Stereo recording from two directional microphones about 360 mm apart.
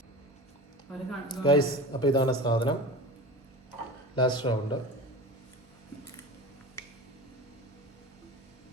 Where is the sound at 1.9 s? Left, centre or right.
Centre.